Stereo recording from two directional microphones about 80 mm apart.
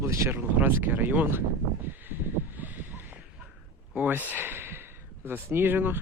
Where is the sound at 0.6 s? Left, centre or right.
Right.